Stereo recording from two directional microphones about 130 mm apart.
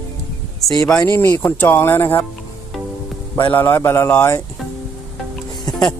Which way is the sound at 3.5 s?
15° left (ahead or behind).